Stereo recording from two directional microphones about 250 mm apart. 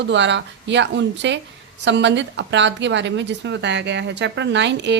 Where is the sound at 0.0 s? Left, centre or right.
Right.